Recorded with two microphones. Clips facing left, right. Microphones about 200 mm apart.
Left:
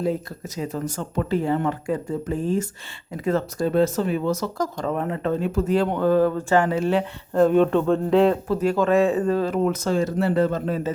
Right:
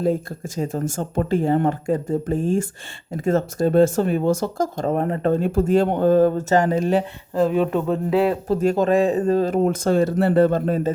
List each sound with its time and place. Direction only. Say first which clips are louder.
0.0 s speech: right 3 dB; 50° right (ahead or behind)
7.3 s speech: left 2 dB; 5° right (ahead or behind)
8.4 s speech: right 2 dB; 40° right (ahead or behind)
9.9 s speech: right 6 dB; 60° right (ahead or behind)